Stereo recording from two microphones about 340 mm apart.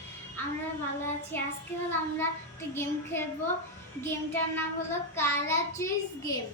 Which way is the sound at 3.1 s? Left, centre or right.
Centre.